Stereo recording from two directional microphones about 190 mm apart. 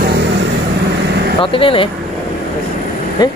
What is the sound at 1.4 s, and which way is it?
Speech, 30° left (ahead or behind).